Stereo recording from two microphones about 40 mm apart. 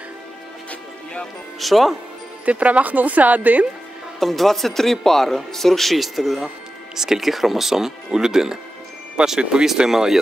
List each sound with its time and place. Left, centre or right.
1.6 s speech: centre
2.4 s speech: right
4.2 s speech: centre